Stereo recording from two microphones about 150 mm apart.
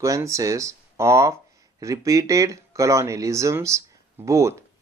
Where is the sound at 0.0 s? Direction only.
20° right (ahead or behind).